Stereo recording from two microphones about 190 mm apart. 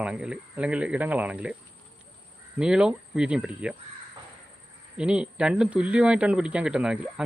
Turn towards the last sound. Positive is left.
turn(degrees=-5)  # may be behind; listen again after turning